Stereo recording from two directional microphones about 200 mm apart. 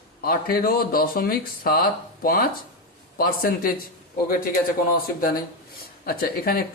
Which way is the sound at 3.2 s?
45° left (ahead or behind).